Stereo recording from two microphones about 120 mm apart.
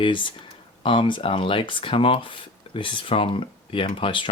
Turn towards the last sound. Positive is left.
turn(degrees=45)  # may be behind; listen again after turning